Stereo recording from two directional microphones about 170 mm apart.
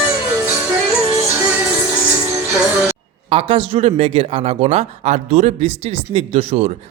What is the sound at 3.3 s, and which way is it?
Speech, 35° right (ahead or behind).